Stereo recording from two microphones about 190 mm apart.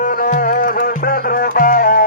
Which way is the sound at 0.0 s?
45° left (ahead or behind).